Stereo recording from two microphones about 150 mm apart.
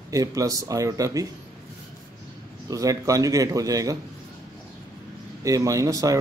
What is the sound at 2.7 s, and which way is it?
Speech, 25° right (ahead or behind).